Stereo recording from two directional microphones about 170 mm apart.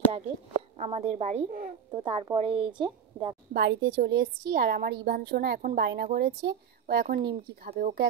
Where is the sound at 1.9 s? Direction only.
25° right (ahead or behind).